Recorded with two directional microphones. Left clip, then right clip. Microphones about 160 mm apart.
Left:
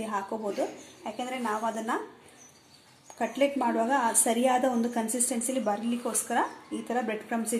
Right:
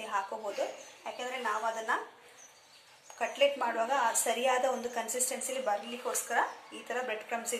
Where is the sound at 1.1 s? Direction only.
70° left (ahead or behind).